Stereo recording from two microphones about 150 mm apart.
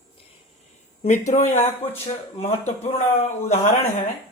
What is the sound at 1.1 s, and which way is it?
A man's voice, 50° left (ahead or behind).